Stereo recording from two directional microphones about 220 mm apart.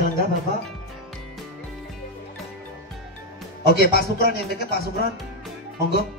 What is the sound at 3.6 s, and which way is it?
Speech, 45° left (ahead or behind).